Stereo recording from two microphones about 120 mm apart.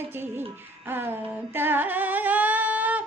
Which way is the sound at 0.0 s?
20° right (ahead or behind).